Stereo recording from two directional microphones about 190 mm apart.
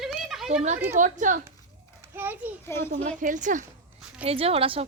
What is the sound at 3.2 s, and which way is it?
Speech, 40° right (ahead or behind).